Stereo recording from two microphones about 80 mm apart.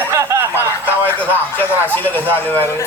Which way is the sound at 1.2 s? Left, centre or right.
Left.